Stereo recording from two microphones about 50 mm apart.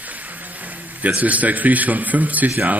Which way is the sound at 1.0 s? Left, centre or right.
Right.